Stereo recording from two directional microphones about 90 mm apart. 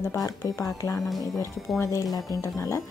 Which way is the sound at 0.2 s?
35° left (ahead or behind).